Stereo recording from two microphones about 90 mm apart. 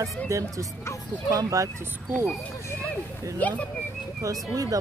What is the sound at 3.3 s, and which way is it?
Speech, 15° left (ahead or behind).